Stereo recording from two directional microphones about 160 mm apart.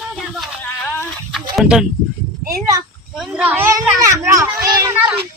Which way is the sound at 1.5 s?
5° right (ahead or behind).